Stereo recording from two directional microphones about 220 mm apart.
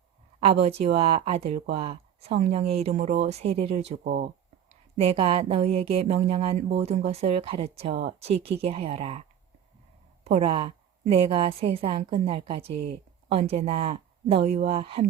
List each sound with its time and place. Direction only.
0.3 s speech: 30° right (ahead or behind)
10.2 s speech: 30° right (ahead or behind)